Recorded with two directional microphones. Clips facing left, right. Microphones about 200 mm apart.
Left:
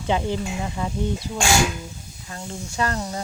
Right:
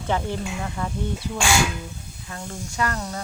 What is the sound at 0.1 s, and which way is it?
Speech, 15° left (ahead or behind).